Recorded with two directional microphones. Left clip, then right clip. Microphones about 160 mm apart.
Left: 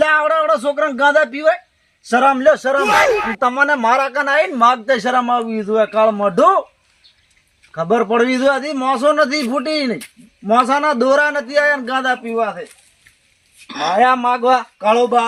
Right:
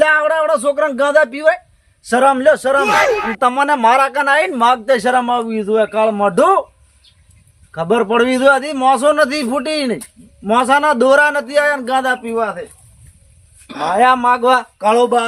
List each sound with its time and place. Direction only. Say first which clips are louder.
0.3 s a man's voice: right 1 dB; 40° right (ahead or behind)
2.8 s speech: left 3 dB; centre (ahead or behind)
3.3 s a man's voice: right 1 dB; 40° right (ahead or behind)
7.8 s a man's voice: right 1 dB; 35° right (ahead or behind)
12.0 s speech: right 1 dB; centre (ahead or behind)
13.8 s speech: right 2 dB; centre (ahead or behind)